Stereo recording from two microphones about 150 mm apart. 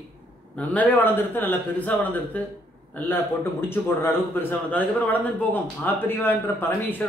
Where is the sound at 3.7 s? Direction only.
15° left (ahead or behind).